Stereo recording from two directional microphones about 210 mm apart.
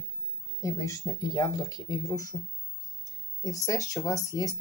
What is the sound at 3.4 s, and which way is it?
Speech, 15° left (ahead or behind).